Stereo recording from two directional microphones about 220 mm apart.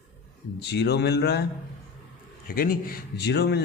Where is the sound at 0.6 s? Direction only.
50° left (ahead or behind).